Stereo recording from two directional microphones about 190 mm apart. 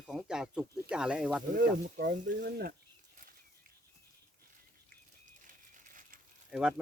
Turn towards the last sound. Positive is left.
turn(degrees=-5)  # may be behind; listen again after turning